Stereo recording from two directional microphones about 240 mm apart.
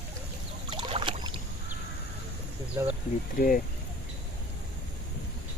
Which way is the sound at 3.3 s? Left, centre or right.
Left.